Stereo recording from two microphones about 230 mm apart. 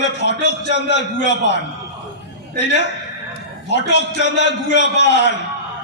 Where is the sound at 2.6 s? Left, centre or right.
Left.